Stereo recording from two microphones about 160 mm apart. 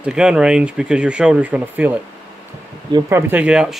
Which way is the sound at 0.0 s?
5° right (ahead or behind).